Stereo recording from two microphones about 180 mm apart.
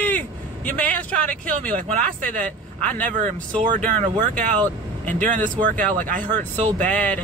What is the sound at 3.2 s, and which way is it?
Speech, 45° right (ahead or behind).